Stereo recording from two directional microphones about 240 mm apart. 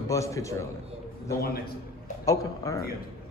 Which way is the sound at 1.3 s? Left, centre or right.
Left.